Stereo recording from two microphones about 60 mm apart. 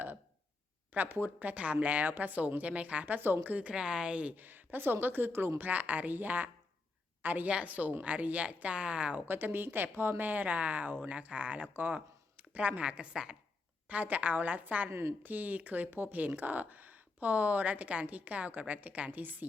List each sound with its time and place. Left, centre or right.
0.9 s speech: right
3.2 s speech: right
3.8 s a woman's voice: centre
4.4 s a woman's voice: right
9.2 s speech: right